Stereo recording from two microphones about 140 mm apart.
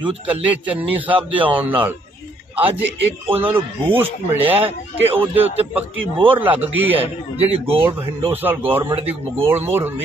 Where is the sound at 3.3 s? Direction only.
15° right (ahead or behind).